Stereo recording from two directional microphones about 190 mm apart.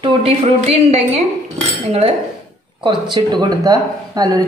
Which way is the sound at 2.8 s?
25° right (ahead or behind).